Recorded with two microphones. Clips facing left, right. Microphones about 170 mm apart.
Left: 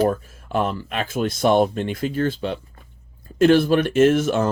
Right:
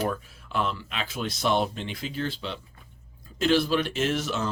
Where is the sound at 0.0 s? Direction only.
45° left (ahead or behind).